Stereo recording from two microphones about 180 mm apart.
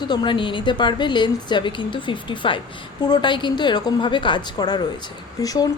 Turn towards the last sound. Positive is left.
turn(degrees=20)  # may be behind; listen again after turning